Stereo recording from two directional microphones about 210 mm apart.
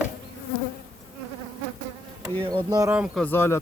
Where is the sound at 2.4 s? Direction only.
20° right (ahead or behind).